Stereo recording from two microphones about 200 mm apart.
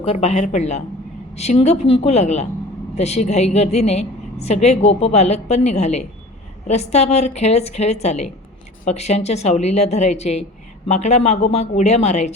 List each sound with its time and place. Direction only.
0.0 s a woman's voice: 35° left (ahead or behind)